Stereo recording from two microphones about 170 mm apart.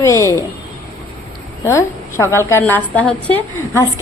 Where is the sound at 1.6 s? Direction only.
15° left (ahead or behind).